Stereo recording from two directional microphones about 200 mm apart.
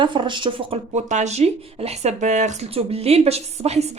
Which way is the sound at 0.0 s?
25° right (ahead or behind).